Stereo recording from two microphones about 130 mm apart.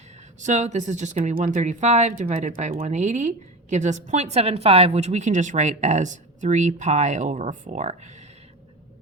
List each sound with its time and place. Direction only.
0.3 s speech: 70° right (ahead or behind)